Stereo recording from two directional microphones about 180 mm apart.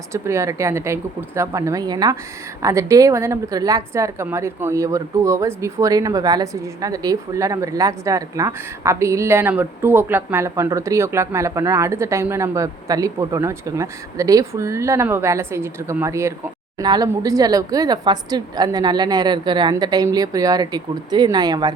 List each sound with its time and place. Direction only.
0.1 s a woman's voice: 15° right (ahead or behind)